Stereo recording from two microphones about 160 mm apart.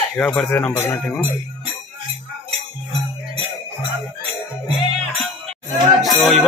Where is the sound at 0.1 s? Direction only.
10° left (ahead or behind).